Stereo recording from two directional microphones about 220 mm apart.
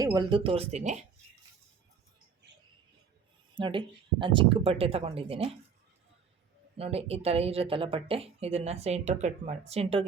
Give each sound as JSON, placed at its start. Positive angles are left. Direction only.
{"t": 0.0, "sound": "speech", "side_deg": -20}
{"t": 3.5, "sound": "speech", "side_deg": -20}
{"t": 6.7, "sound": "speech", "side_deg": -25}